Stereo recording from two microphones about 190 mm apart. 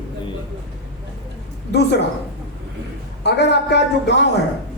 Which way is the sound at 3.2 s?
65° left (ahead or behind).